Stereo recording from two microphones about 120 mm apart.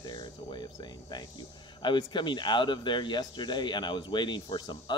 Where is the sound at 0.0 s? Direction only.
40° left (ahead or behind).